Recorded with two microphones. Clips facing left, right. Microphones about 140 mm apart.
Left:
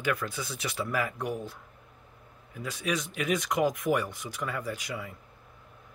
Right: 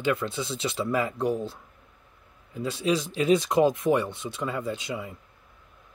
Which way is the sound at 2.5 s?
25° right (ahead or behind).